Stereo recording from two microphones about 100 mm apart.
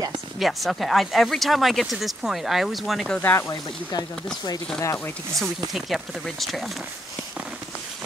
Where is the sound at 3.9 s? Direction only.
45° left (ahead or behind).